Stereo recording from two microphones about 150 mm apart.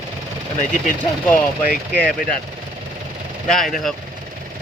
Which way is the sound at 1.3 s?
10° left (ahead or behind).